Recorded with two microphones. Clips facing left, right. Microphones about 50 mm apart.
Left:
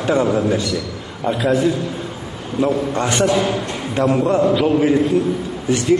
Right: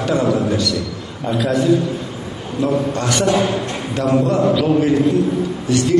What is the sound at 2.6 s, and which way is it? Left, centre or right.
A man's voice, left.